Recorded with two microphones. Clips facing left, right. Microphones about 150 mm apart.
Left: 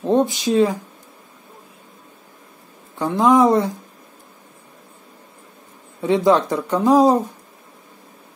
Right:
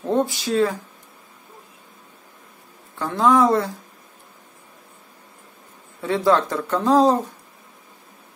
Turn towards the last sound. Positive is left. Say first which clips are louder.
# left 2 dB
turn(degrees=10)  # may be behind; listen again after turning